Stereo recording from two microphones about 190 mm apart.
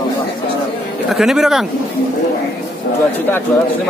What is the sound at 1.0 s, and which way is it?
Speech, centre (ahead or behind).